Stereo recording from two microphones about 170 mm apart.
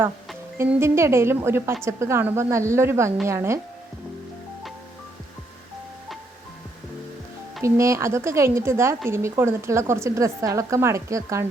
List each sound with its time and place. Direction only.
0.5 s a woman's voice: 15° right (ahead or behind)
7.6 s a woman's voice: 15° right (ahead or behind)